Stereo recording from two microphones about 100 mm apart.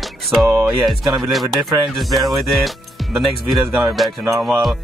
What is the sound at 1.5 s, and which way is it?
Speech, centre (ahead or behind).